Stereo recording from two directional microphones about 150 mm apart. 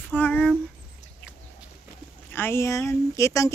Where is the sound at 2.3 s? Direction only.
15° left (ahead or behind).